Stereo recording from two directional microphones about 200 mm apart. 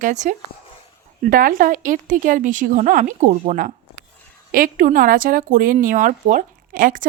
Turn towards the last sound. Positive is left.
turn(degrees=-45)  # may be behind; listen again after turning